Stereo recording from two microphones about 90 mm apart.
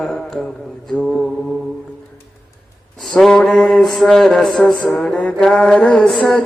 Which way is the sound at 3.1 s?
5° left (ahead or behind).